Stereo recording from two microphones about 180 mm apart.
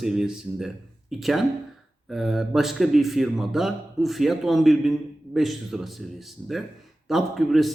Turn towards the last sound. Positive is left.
turn(degrees=0)  # may be behind; listen again after turning